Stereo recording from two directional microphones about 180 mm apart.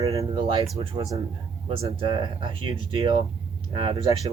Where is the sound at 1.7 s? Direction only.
30° right (ahead or behind).